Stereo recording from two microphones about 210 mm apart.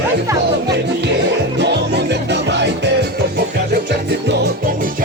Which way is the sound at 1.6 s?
55° right (ahead or behind).